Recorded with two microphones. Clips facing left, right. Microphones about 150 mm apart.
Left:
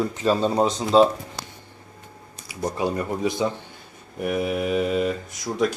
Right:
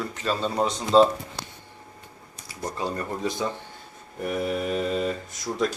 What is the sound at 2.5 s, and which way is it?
Speech, 15° left (ahead or behind).